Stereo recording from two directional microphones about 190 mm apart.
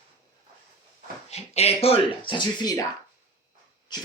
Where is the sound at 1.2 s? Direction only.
35° left (ahead or behind).